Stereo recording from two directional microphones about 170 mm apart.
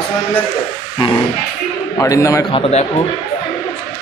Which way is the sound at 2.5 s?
35° left (ahead or behind).